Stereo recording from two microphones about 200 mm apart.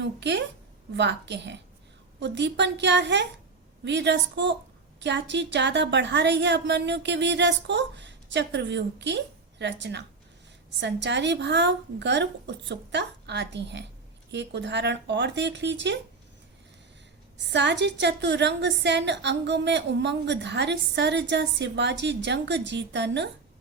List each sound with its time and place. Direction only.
0.0 s a woman's voice: 60° right (ahead or behind)
17.3 s a woman's voice: 60° right (ahead or behind)